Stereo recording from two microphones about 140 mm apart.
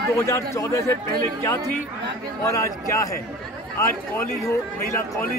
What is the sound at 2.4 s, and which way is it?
Speech, 20° left (ahead or behind).